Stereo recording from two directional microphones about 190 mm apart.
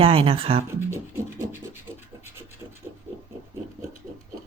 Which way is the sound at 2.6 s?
20° right (ahead or behind).